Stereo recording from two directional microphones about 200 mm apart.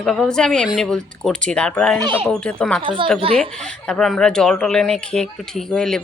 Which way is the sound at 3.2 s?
25° right (ahead or behind).